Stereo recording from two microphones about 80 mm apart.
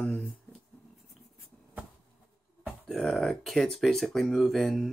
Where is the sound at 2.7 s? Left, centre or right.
Centre.